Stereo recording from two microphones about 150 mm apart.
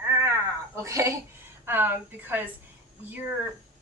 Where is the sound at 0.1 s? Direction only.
20° right (ahead or behind).